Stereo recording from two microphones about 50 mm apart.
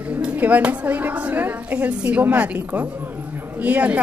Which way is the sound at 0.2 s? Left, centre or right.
Right.